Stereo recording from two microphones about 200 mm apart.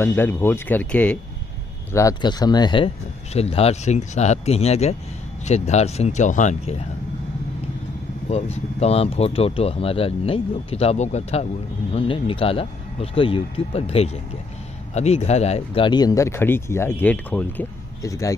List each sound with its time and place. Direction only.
0.0 s speech: 10° left (ahead or behind); by 6.8 s 35° left (ahead or behind)
8.3 s speech: 30° left (ahead or behind); by 18.3 s 15° left (ahead or behind)